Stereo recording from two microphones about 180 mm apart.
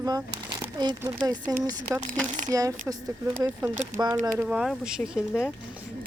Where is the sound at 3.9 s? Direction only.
10° right (ahead or behind).